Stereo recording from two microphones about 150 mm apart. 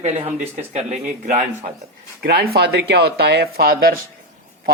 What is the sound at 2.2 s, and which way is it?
Speech, 90° right.